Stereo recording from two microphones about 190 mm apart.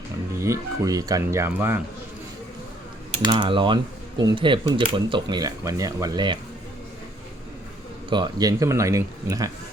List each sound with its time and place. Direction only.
0.3 s speech: 15° right (ahead or behind)
3.2 s speech: 25° right (ahead or behind)
8.1 s speech: 20° right (ahead or behind)